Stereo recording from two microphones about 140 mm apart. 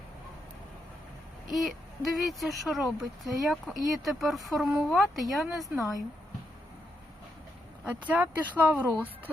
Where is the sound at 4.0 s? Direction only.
Centre (ahead or behind).